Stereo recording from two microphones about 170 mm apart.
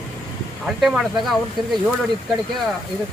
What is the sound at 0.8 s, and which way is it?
Speech, centre (ahead or behind).